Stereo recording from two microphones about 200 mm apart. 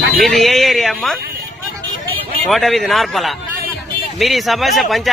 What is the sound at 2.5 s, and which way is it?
A man's voice, centre (ahead or behind).